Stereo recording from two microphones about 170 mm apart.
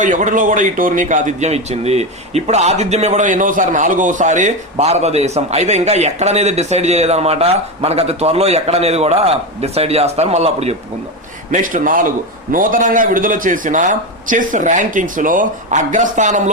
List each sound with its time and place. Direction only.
0.0 s a man's voice: 50° right (ahead or behind)
11.5 s a man's voice: 50° right (ahead or behind)